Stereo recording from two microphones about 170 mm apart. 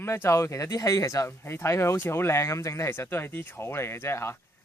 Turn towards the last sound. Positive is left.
turn(degrees=15)  # may be behind; listen again after turning